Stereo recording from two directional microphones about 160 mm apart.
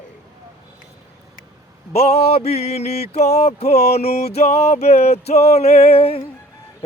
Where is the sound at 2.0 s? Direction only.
40° left (ahead or behind).